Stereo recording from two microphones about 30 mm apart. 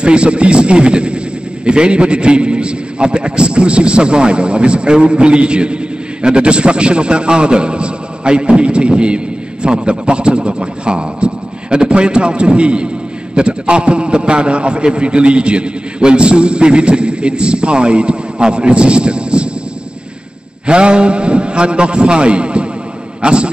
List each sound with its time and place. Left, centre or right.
0.0 s a man's voice: right
20.6 s a man's voice: right